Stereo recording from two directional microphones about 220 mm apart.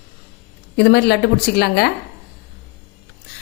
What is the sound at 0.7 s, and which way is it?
A woman's voice, 50° left (ahead or behind).